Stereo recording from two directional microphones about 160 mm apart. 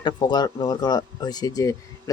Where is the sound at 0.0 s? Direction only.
25° left (ahead or behind).